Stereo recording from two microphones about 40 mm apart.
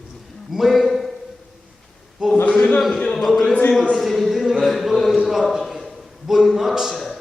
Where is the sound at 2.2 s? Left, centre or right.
Centre.